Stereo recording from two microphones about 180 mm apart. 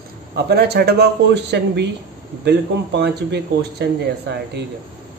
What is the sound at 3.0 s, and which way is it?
Speech, 70° right (ahead or behind).